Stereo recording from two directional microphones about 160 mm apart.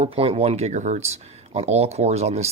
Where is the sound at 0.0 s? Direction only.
40° right (ahead or behind).